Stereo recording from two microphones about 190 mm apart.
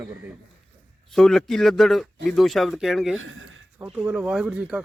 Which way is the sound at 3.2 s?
90° right.